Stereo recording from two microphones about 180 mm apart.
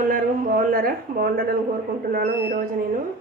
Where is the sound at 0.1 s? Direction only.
50° right (ahead or behind).